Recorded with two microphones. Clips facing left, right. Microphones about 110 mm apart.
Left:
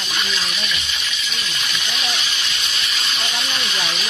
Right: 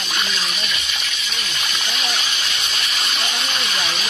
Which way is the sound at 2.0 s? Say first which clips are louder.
Right 1 dB; 50° right (ahead or behind).